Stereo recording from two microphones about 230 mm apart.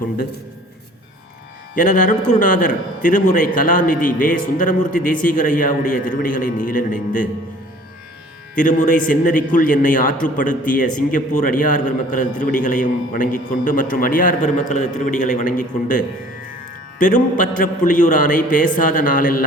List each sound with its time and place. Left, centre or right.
1.7 s a man's voice: left
8.5 s a man's voice: left